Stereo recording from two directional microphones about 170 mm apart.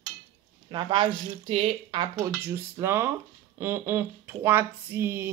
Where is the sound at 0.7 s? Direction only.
30° right (ahead or behind).